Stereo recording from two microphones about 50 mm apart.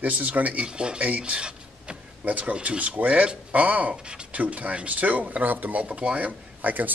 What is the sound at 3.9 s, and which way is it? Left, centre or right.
Speech, centre.